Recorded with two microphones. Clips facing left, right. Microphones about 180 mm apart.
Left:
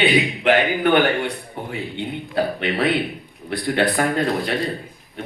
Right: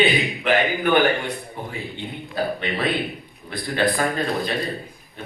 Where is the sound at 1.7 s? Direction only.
70° left (ahead or behind).